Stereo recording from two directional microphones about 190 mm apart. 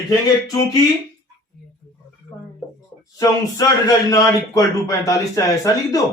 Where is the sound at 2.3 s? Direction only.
20° left (ahead or behind).